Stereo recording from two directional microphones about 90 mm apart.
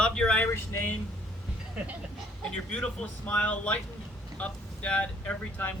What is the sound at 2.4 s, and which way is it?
Speech, 10° left (ahead or behind).